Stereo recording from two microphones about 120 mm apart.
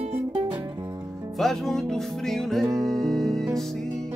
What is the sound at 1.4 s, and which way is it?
Music, centre (ahead or behind).